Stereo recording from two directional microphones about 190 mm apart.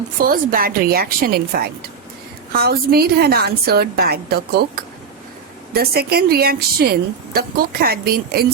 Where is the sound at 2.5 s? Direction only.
50° right (ahead or behind).